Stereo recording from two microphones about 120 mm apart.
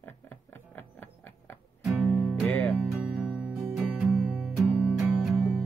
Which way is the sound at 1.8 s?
10° right (ahead or behind).